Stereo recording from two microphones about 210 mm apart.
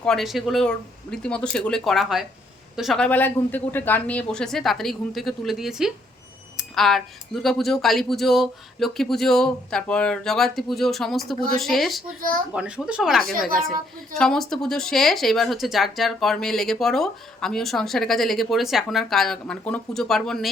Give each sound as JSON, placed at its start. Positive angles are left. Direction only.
{"t": 0.0, "sound": "a woman's voice", "side_deg": 0}
{"t": 6.6, "sound": "a sound", "side_deg": 0}
{"t": 7.4, "sound": "a woman's voice", "side_deg": 0}